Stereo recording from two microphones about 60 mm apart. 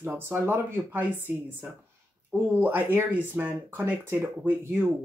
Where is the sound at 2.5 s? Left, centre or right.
Right.